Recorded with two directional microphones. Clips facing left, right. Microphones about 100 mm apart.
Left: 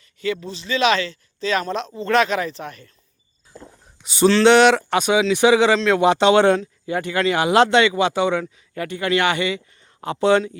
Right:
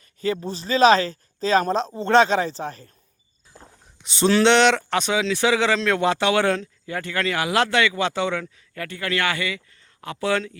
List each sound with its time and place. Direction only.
0.2 s speech: 40° right (ahead or behind)
4.0 s a sound: 5° left (ahead or behind)
4.4 s speech: 5° left (ahead or behind); by 10.4 s 25° left (ahead or behind)